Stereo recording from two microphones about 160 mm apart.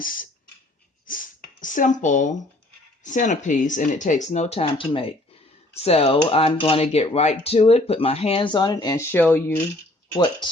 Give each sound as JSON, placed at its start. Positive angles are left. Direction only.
{"t": 0.0, "sound": "a sound", "side_deg": 60}
{"t": 3.0, "sound": "speech", "side_deg": 50}
{"t": 9.1, "sound": "speech", "side_deg": 10}